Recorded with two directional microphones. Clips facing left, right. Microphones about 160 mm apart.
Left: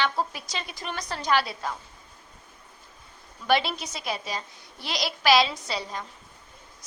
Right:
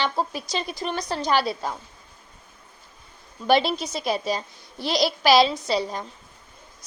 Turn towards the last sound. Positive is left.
turn(degrees=-35)  # may be behind; listen again after turning